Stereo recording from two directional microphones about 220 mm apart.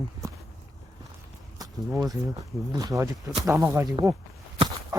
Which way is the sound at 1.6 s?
15° right (ahead or behind).